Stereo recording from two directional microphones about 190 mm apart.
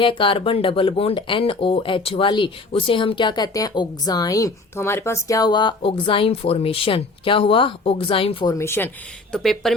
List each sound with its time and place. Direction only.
0.0 s speech: 25° left (ahead or behind)
8.5 s speech: 15° left (ahead or behind)
9.3 s a woman's voice: centre (ahead or behind)